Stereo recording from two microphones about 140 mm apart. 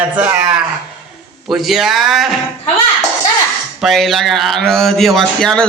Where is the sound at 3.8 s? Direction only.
Centre (ahead or behind).